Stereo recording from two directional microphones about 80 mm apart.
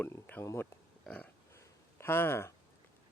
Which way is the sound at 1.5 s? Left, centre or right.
Left.